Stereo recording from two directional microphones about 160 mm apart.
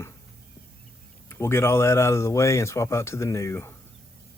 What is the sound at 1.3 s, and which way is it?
Speech, 15° left (ahead or behind).